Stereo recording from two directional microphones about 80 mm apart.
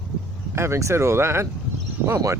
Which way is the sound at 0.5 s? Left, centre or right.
Right.